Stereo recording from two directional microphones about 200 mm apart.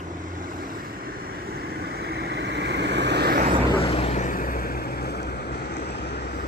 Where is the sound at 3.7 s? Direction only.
30° left (ahead or behind).